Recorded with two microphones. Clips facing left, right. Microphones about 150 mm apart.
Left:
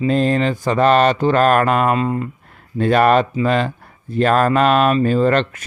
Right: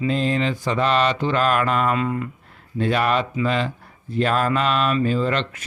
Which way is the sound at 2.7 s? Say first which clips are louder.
Left 7 dB; 50° left (ahead or behind).